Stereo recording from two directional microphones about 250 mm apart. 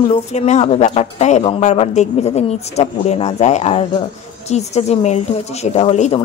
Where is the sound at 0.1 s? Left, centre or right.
Left.